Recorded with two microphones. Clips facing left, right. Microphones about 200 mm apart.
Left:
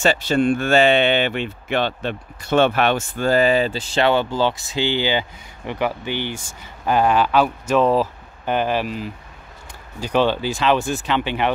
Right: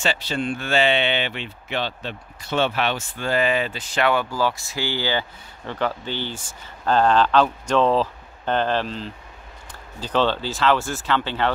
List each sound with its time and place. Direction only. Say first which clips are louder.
0.0 s speech: left 7 dB; 45° left (ahead or behind); by 11.5 s 15° left (ahead or behind)